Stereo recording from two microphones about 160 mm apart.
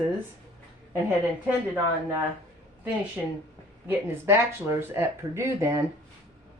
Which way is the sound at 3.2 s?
5° right (ahead or behind).